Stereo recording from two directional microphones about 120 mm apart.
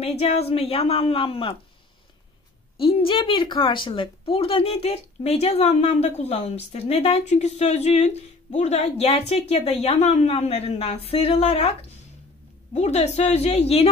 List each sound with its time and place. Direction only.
0.0 s a woman's voice: 60° left (ahead or behind)
2.8 s speech: 45° left (ahead or behind)
12.7 s speech: 65° left (ahead or behind)